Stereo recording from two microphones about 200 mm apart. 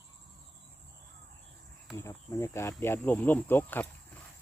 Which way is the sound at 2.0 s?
15° left (ahead or behind).